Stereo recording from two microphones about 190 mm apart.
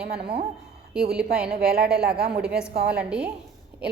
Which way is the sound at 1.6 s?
55° right (ahead or behind).